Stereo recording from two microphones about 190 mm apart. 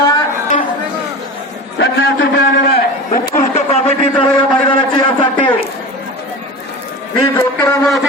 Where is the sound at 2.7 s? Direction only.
55° left (ahead or behind); by 4.3 s 30° left (ahead or behind).